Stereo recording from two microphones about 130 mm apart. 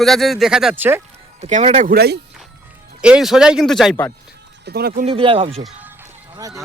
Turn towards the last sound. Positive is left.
turn(degrees=-25)  # may be behind; listen again after turning